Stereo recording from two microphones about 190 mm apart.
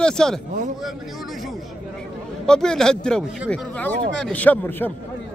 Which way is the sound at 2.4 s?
5° left (ahead or behind).